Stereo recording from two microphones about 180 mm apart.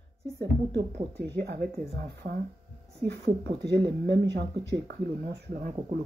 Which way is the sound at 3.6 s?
65° right (ahead or behind).